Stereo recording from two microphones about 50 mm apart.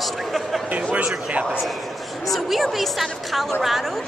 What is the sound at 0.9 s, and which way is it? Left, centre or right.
Speech, right.